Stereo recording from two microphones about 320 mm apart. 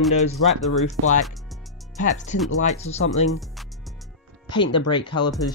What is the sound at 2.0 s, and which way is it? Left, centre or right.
Chopping, left.